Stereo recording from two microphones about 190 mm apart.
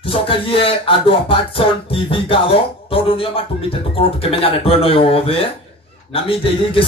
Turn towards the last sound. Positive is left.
turn(degrees=30)  # may be behind; listen again after turning